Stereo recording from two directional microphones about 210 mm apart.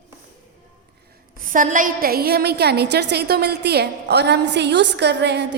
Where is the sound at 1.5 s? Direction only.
40° right (ahead or behind).